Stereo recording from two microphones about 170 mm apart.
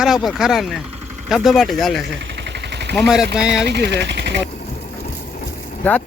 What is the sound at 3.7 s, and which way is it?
Speech, 75° right (ahead or behind).